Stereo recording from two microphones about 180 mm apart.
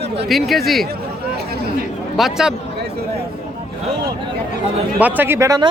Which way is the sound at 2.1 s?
Centre (ahead or behind).